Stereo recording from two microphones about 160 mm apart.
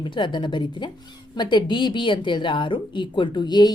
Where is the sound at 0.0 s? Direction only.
30° left (ahead or behind).